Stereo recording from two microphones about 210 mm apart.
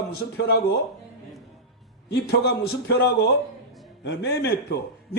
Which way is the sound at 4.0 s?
55° left (ahead or behind).